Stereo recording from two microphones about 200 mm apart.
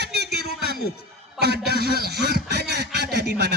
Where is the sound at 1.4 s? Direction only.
55° right (ahead or behind).